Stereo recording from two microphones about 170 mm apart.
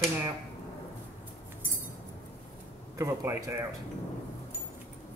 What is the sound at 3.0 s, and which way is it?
Speech, 15° right (ahead or behind).